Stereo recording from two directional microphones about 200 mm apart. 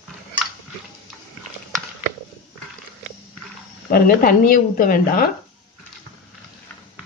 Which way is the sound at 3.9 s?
45° left (ahead or behind).